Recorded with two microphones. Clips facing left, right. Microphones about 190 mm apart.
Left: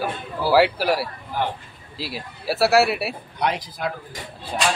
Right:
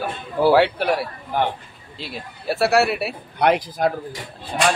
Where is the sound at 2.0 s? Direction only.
5° left (ahead or behind).